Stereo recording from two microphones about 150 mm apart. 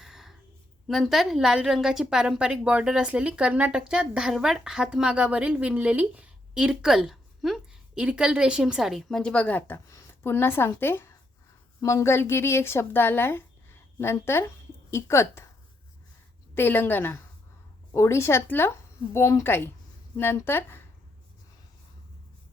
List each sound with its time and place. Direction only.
0.0 s a sound: 5° right (ahead or behind)
0.9 s a woman's voice: centre (ahead or behind); by 15.4 s 15° left (ahead or behind)
16.6 s speech: 15° left (ahead or behind)